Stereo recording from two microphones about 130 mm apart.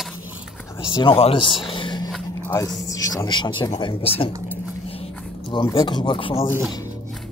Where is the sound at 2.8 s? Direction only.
25° left (ahead or behind).